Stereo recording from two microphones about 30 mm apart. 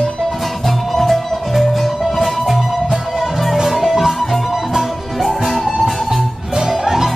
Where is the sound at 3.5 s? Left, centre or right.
Centre.